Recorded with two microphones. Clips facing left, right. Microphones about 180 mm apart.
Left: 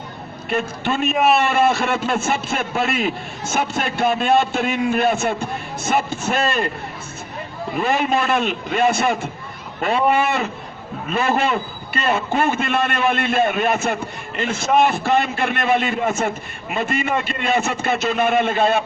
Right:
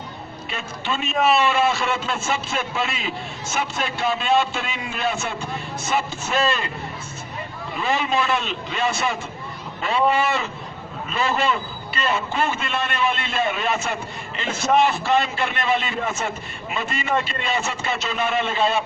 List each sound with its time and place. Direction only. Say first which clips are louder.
0.5 s a man's voice: left 7 dB; 55° left (ahead or behind)
7.8 s a man's voice: left 3 dB; 50° left (ahead or behind)